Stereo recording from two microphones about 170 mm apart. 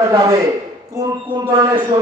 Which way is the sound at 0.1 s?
20° right (ahead or behind).